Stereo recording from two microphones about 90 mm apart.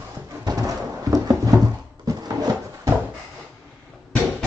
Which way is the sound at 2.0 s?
45° right (ahead or behind).